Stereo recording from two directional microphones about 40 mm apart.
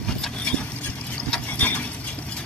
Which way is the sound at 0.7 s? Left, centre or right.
Left.